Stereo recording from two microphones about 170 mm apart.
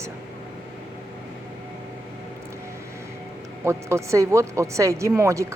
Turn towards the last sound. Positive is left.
turn(degrees=-15)  # may be behind; listen again after turning